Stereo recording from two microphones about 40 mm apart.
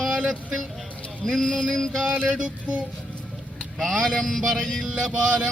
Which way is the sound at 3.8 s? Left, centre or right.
Centre.